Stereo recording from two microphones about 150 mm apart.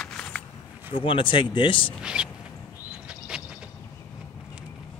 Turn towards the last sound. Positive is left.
turn(degrees=-5)  # may be behind; listen again after turning